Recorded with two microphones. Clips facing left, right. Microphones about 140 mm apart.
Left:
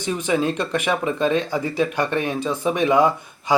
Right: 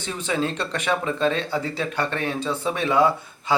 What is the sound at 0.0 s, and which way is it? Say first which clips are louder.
Speech: left 4 dB; 15° left (ahead or behind).